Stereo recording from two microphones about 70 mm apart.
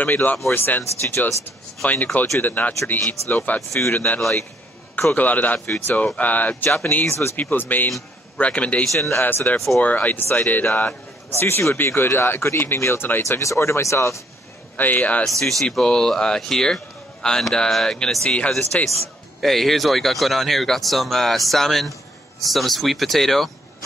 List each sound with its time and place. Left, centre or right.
0.0 s speech: left
2.4 s speech: left
7.1 s speech: left
7.3 s speech: left
8.9 s speech: left
9.2 s speech: left
13.4 s speech: left
14.8 s speech: left
15.2 s speech: centre
18.9 s a man's voice: centre